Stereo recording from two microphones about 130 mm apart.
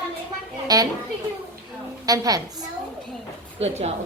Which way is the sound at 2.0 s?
30° right (ahead or behind).